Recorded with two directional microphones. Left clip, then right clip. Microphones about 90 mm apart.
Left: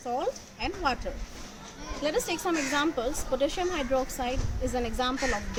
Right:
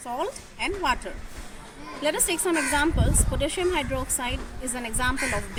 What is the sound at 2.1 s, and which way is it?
A woman's voice, 25° left (ahead or behind).